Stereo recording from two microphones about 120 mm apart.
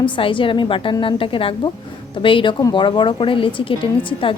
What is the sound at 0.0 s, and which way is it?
A woman's voice, 45° left (ahead or behind).